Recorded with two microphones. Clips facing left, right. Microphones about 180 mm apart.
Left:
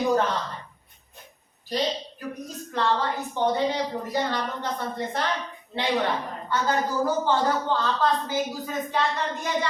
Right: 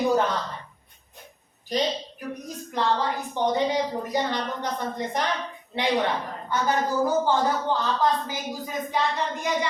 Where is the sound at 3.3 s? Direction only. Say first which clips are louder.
Right 1 dB; 15° right (ahead or behind).